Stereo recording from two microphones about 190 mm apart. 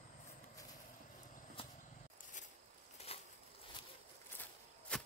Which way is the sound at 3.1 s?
30° left (ahead or behind).